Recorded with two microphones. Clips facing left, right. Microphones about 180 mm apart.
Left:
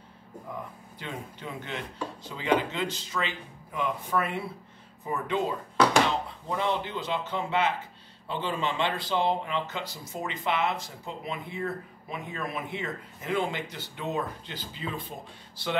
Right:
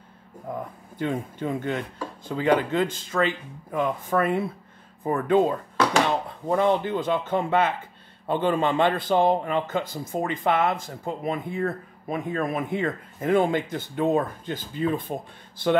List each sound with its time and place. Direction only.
0.9 s speech: 50° right (ahead or behind)